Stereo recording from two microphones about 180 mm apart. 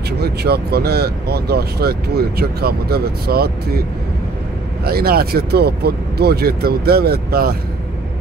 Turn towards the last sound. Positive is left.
turn(degrees=-60)  # may be behind; listen again after turning